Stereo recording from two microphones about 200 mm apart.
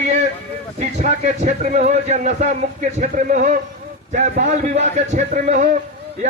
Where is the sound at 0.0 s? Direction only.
35° right (ahead or behind).